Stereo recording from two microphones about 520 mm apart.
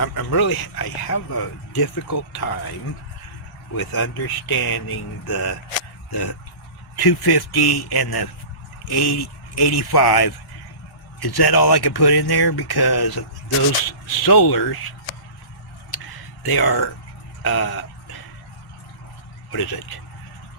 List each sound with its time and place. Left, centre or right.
0.0 s speech: left
3.8 s speech: left
14.3 s speech: left
16.5 s speech: left
19.5 s speech: left